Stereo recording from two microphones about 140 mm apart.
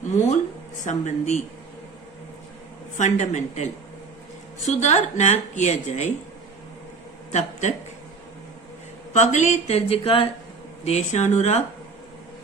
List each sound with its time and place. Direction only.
0.9 s a woman's voice: 60° left (ahead or behind)
3.0 s a woman's voice: 55° left (ahead or behind)
7.3 s speech: 55° left (ahead or behind)
9.1 s speech: 55° left (ahead or behind)
10.8 s speech: 55° left (ahead or behind)